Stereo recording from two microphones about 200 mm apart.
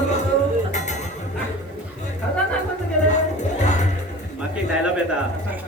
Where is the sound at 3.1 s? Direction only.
35° left (ahead or behind).